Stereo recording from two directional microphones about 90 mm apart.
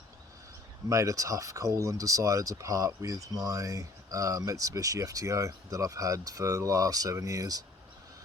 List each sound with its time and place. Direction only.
0.9 s speech: 35° right (ahead or behind)